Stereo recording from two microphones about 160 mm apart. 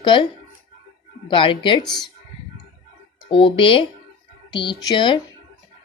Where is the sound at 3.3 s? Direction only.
30° left (ahead or behind).